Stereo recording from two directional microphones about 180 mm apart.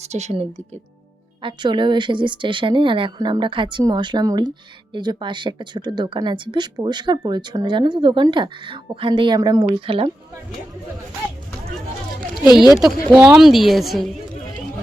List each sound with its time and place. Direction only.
0.0 s speech: 40° right (ahead or behind)
1.4 s speech: 25° right (ahead or behind)
13.1 s a woman's voice: 5° right (ahead or behind)